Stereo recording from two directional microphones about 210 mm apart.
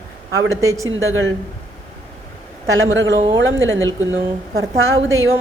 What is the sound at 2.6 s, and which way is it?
A man's voice, 70° right (ahead or behind).